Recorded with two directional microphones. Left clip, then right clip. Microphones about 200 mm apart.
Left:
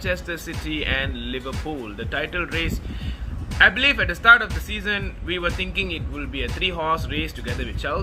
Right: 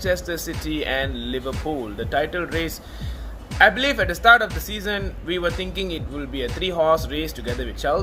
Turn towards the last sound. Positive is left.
turn(degrees=15)  # may be behind; listen again after turning